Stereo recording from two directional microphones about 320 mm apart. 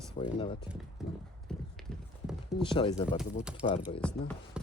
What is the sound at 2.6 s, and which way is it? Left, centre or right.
Speech, centre.